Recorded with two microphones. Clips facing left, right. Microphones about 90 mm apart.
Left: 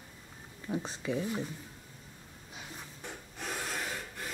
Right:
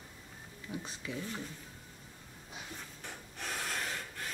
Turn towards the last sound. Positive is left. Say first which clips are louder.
# left 1 dB
turn(degrees=5)  # may be behind; listen again after turning